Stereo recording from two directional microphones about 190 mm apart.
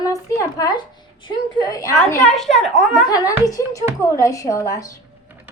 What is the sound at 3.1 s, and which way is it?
Speech, 15° left (ahead or behind).